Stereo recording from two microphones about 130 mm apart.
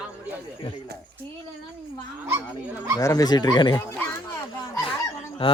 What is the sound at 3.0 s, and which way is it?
Speech, 25° left (ahead or behind).